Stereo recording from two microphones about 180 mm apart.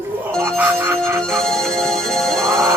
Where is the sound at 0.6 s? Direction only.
15° right (ahead or behind).